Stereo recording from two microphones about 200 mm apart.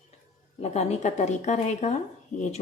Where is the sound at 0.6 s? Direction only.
35° left (ahead or behind).